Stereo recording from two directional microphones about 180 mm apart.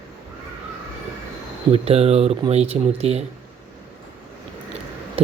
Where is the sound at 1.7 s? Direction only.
35° right (ahead or behind).